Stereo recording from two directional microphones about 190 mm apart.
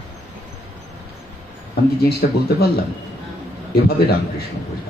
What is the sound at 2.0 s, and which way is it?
Speech, 55° left (ahead or behind).